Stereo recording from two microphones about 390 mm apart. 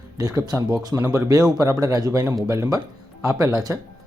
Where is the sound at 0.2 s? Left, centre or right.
Centre.